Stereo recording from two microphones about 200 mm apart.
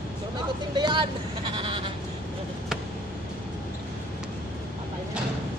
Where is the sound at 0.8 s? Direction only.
20° right (ahead or behind).